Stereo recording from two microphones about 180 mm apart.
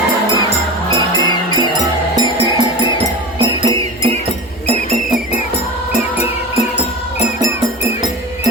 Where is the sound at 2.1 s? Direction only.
20° right (ahead or behind).